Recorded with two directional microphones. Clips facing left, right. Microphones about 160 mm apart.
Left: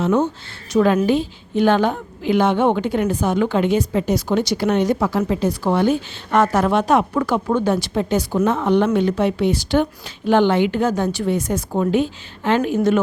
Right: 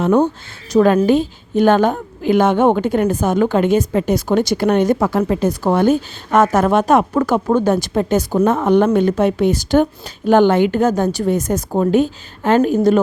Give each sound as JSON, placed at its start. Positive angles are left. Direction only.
{"t": 0.0, "sound": "a woman's voice", "side_deg": -55}